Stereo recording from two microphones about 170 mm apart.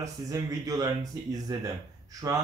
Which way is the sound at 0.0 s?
20° right (ahead or behind).